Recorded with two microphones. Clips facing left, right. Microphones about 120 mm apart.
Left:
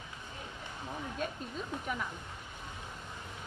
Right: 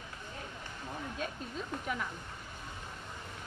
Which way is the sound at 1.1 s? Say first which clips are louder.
Left 2 dB; centre (ahead or behind).